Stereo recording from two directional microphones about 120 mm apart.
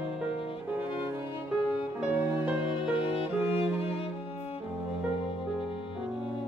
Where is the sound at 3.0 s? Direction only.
55° left (ahead or behind).